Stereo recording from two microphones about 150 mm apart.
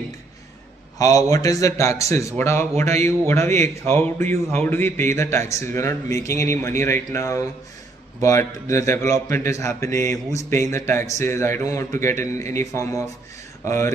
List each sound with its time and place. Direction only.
0.9 s a man's voice: 25° left (ahead or behind)